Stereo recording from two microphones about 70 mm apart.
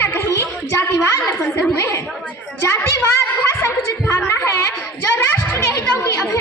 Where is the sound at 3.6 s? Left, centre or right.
Left.